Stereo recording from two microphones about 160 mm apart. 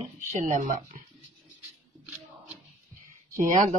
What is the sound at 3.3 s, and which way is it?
Speech, 55° right (ahead or behind).